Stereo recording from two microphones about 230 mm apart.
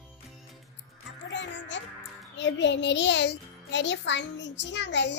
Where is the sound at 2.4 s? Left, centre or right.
Left.